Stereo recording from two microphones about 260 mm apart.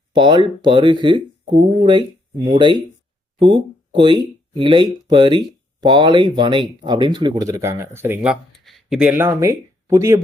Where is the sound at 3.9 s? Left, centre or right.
Centre.